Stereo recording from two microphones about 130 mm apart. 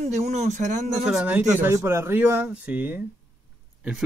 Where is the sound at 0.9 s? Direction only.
5° right (ahead or behind).